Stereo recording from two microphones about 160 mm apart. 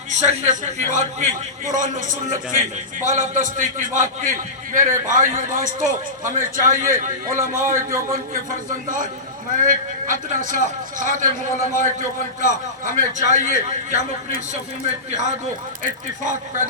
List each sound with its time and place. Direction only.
0.1 s a man's voice: 45° right (ahead or behind)
12.4 s a man's voice: 55° right (ahead or behind)
15.8 s a man's voice: 55° right (ahead or behind)